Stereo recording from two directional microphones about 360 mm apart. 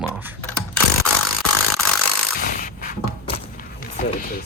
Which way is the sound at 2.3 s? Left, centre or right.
Left.